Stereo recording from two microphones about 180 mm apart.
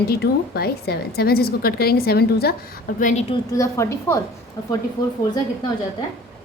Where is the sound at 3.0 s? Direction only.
40° left (ahead or behind).